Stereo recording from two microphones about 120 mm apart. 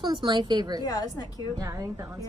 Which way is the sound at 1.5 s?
30° right (ahead or behind).